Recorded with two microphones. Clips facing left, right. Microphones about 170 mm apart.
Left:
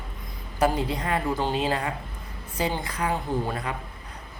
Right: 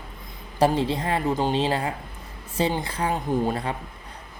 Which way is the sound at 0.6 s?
25° right (ahead or behind).